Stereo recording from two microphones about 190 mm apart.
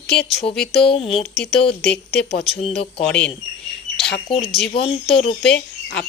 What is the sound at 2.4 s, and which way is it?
Speech, 30° left (ahead or behind).